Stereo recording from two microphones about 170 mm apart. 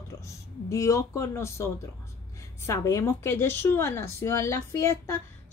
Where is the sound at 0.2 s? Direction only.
15° left (ahead or behind).